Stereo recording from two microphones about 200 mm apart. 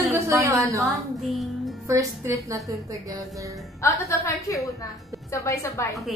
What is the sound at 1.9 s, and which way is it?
Speech, 15° right (ahead or behind).